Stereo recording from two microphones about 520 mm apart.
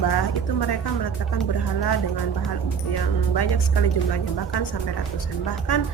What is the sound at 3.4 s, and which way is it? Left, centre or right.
A woman's voice, left.